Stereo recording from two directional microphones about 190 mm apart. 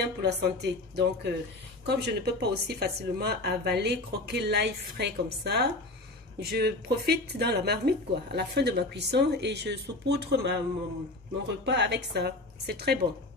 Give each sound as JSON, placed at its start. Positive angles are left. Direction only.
{"t": 0.2, "sound": "speech", "side_deg": -65}